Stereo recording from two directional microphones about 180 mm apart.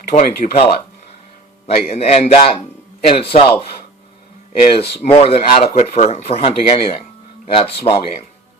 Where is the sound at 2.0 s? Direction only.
35° left (ahead or behind).